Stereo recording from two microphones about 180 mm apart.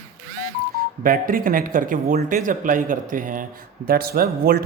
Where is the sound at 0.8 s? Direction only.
55° right (ahead or behind).